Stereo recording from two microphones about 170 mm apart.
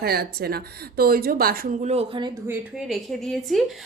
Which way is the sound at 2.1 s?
25° right (ahead or behind).